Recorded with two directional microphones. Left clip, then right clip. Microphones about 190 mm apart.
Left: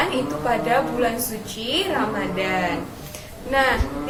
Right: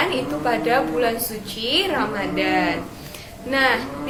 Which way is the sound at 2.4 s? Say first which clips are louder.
Right 4 dB; 25° right (ahead or behind).